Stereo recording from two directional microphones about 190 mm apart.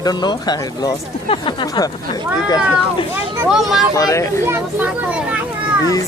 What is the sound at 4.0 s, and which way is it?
Speech, 15° left (ahead or behind).